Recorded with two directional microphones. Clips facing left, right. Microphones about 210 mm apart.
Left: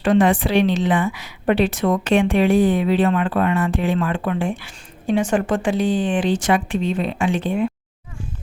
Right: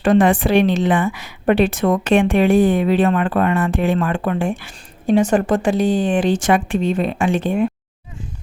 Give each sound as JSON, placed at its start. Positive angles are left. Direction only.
{"t": 0.0, "sound": "a woman's voice", "side_deg": -45}